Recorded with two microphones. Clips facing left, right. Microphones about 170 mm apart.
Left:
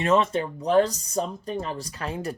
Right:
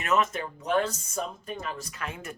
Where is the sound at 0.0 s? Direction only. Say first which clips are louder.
Left 5 dB; 30° left (ahead or behind).